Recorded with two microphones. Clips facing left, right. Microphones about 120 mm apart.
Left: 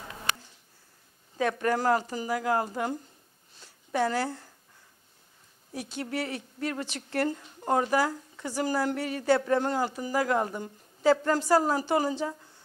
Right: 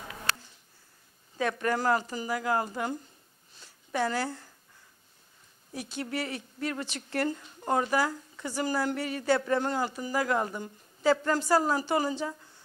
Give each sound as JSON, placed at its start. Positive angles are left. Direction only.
{"t": 0.3, "sound": "a sound", "side_deg": 15}
{"t": 1.4, "sound": "speech", "side_deg": 40}
{"t": 5.9, "sound": "a woman's voice", "side_deg": 40}